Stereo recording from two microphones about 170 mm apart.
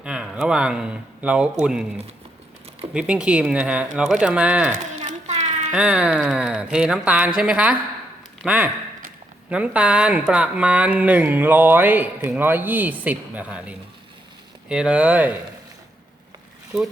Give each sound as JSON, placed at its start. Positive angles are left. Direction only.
{"t": 0.0, "sound": "speech", "side_deg": -5}
{"t": 2.9, "sound": "speech", "side_deg": -5}
{"t": 4.9, "sound": "a sound", "side_deg": -45}
{"t": 5.7, "sound": "speech", "side_deg": -5}